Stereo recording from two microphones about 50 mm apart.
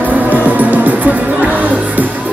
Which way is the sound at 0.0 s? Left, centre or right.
Right.